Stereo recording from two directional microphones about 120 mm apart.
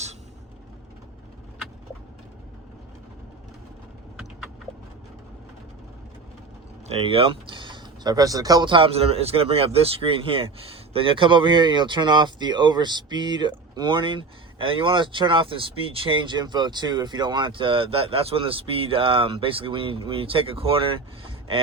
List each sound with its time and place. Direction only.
6.8 s speech: 55° right (ahead or behind)